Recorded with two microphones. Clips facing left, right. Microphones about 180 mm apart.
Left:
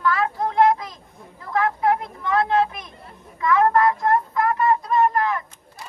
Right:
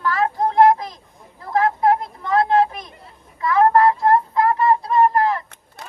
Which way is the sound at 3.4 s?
35° right (ahead or behind).